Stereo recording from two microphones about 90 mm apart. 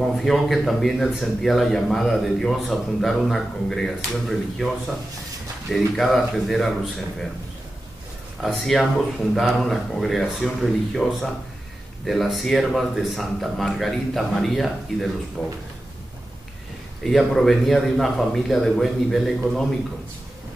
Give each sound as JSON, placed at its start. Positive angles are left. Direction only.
{"t": 0.0, "sound": "a man's voice", "side_deg": 0}
{"t": 5.7, "sound": "a man's voice", "side_deg": 0}
{"t": 8.4, "sound": "a man's voice", "side_deg": 0}
{"t": 17.0, "sound": "a man's voice", "side_deg": 0}